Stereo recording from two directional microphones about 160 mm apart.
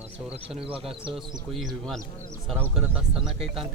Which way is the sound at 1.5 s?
Centre (ahead or behind).